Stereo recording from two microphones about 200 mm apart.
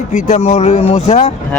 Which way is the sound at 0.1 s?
30° left (ahead or behind).